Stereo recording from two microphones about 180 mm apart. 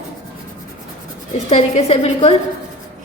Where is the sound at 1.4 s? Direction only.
35° left (ahead or behind).